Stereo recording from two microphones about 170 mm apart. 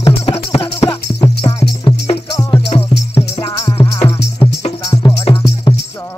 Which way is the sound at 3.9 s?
15° left (ahead or behind).